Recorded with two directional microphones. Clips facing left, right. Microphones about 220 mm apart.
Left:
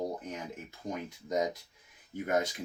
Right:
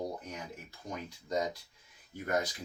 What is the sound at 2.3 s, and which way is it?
Speech, 20° left (ahead or behind).